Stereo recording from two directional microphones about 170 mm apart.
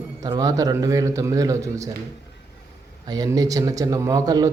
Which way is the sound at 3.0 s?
20° right (ahead or behind).